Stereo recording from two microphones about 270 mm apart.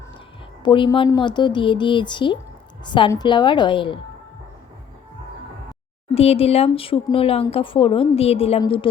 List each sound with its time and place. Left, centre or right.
0.6 s speech: centre
6.1 s speech: left